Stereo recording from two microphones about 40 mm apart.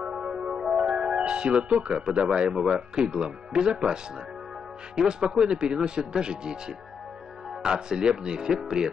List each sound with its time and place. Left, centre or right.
0.0 s music: right
3.0 s speech: right
7.6 s speech: centre